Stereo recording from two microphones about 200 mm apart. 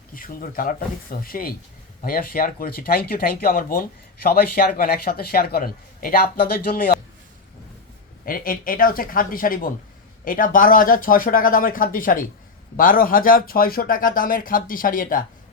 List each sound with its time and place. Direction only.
0.1 s speech: 45° left (ahead or behind)
8.2 s speech: 45° left (ahead or behind)